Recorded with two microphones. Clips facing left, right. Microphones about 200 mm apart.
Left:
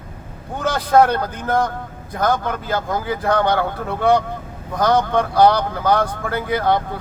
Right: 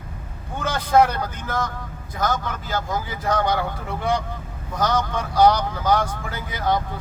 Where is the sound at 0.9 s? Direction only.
55° left (ahead or behind).